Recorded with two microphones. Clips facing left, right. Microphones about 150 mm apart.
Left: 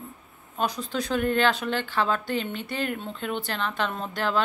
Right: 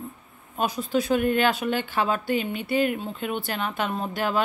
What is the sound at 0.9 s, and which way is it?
Speech, 15° right (ahead or behind).